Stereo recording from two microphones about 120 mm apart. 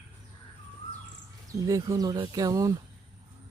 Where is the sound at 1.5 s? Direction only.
30° right (ahead or behind).